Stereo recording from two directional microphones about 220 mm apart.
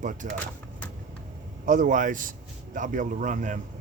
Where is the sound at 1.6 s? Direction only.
35° right (ahead or behind).